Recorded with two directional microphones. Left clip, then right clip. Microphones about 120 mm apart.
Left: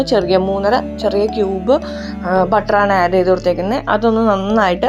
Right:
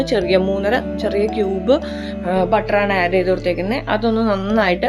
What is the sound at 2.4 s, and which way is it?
A woman's voice, 30° left (ahead or behind).